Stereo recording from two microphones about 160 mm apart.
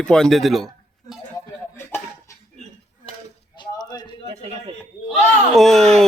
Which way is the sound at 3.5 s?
25° left (ahead or behind).